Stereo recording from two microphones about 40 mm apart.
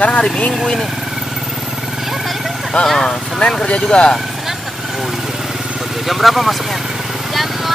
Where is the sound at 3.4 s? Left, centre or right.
Left.